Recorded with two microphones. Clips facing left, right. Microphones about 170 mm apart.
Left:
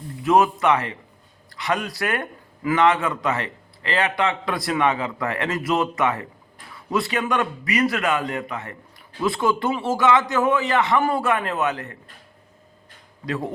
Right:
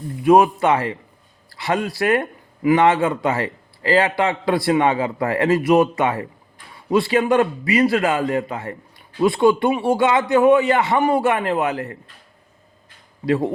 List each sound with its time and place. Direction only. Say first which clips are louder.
0.2 s a man's voice: right 4 dB; 25° right (ahead or behind)
13.2 s a man's voice: right 8 dB; 30° right (ahead or behind)